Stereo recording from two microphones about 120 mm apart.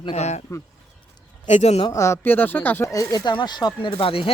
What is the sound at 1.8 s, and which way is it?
Speech, 25° left (ahead or behind).